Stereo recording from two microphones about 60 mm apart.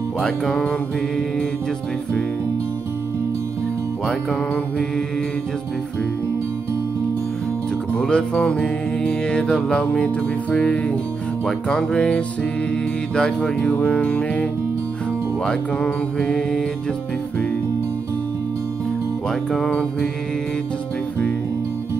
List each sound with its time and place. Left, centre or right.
0.2 s music: centre
4.0 s music: centre
7.9 s music: centre
9.8 s speech: centre
11.4 s music: centre
13.1 s speech: centre
15.4 s music: centre
19.5 s music: centre